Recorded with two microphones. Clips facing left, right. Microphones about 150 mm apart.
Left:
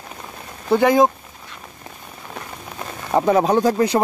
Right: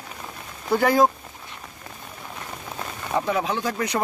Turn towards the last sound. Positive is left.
turn(degrees=30)  # may be behind; listen again after turning